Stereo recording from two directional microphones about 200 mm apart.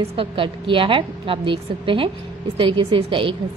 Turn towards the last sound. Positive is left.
turn(degrees=-25)  # may be behind; listen again after turning